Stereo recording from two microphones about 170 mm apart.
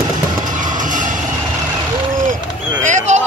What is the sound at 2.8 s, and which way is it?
Basketball bounce, 45° right (ahead or behind).